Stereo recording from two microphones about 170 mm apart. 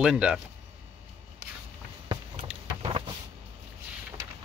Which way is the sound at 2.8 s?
35° right (ahead or behind).